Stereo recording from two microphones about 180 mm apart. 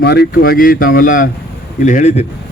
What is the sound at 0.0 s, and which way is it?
Speech, 65° left (ahead or behind).